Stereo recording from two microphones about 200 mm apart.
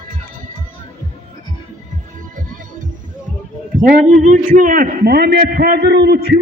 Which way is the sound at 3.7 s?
40° right (ahead or behind).